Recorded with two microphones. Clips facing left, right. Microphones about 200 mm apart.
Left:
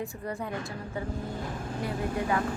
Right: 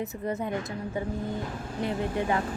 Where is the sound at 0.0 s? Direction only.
20° right (ahead or behind).